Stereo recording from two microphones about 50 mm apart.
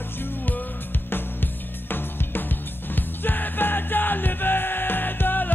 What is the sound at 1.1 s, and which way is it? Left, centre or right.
Music, left.